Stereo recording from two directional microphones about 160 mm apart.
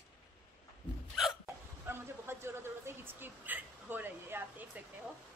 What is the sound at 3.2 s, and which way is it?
Speech, 10° right (ahead or behind).